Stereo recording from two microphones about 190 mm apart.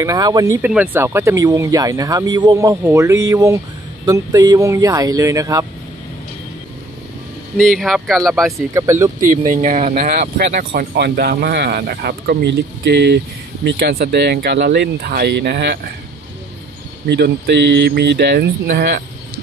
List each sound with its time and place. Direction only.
0.0 s speech: 20° right (ahead or behind)
0.6 s speech: 10° right (ahead or behind)
7.5 s speech: centre (ahead or behind)
8.7 s speech: 15° right (ahead or behind)
9.2 s speech: 45° right (ahead or behind); by 15.9 s 60° right (ahead or behind)
17.1 s speech: 60° right (ahead or behind)